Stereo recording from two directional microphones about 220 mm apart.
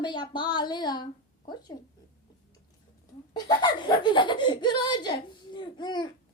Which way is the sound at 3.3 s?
20° left (ahead or behind).